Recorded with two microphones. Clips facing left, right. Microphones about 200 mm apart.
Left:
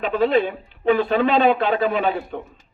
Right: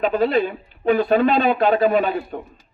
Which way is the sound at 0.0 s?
40° right (ahead or behind).